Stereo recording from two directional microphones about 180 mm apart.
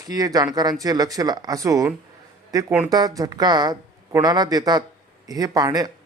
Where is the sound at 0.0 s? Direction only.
20° right (ahead or behind).